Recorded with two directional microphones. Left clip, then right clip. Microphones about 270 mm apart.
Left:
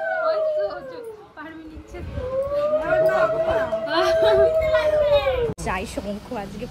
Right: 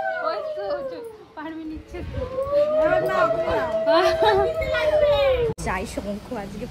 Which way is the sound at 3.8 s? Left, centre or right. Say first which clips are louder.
Right 2 dB; right.